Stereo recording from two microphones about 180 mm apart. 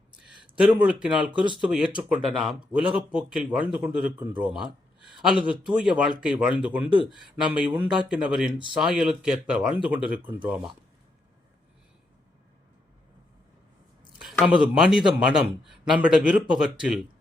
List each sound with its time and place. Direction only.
0.3 s a sound: 5° right (ahead or behind)
1.0 s a man's voice: 5° right (ahead or behind)
14.2 s a man's voice: centre (ahead or behind)